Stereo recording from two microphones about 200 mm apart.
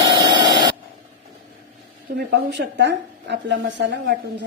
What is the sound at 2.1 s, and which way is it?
A woman's voice, 60° right (ahead or behind).